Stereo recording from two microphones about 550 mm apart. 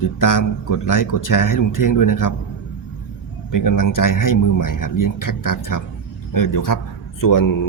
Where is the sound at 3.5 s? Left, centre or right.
Left.